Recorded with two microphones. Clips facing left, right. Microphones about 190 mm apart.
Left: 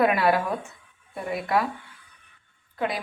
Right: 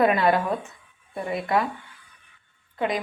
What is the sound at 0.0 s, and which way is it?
A woman's voice, 5° left (ahead or behind).